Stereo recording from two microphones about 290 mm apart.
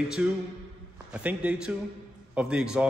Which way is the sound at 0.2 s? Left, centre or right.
Centre.